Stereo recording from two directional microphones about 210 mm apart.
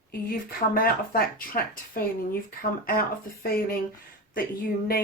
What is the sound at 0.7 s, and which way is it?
Speech, 45° left (ahead or behind).